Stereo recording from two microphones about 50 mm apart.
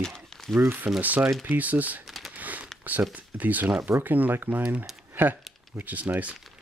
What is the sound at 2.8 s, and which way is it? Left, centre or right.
Speech, right.